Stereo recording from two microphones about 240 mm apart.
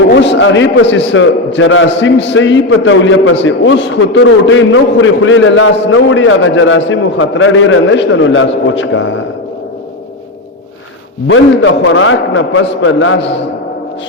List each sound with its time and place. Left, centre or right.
0.1 s a man's voice: left
11.3 s a man's voice: left